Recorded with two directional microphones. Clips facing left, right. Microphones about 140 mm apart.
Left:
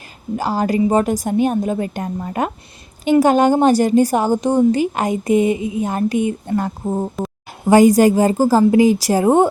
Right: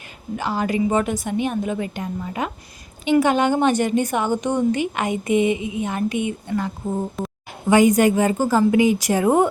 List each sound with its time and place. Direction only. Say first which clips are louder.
0.3 s a woman's voice: left 4 dB; 40° left (ahead or behind)